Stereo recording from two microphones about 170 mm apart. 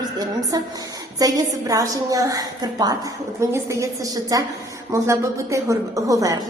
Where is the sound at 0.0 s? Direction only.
25° right (ahead or behind).